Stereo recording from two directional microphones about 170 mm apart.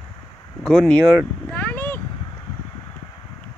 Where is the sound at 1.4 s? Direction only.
10° left (ahead or behind).